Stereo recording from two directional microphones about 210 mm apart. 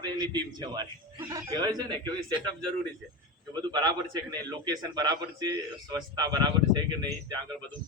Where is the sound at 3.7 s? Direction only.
20° right (ahead or behind).